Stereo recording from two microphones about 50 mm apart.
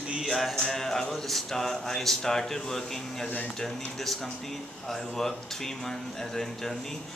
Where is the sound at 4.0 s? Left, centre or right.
Centre.